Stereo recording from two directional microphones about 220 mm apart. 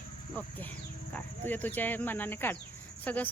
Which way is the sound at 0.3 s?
10° left (ahead or behind).